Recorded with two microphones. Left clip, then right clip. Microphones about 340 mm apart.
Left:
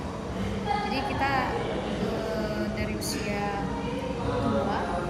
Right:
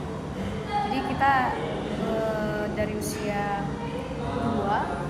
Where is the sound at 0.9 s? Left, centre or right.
Centre.